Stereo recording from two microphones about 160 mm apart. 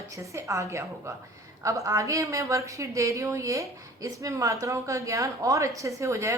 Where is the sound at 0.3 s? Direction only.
20° right (ahead or behind).